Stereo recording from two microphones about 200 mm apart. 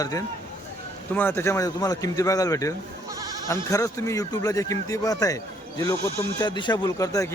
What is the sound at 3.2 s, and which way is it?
Goat, 20° right (ahead or behind).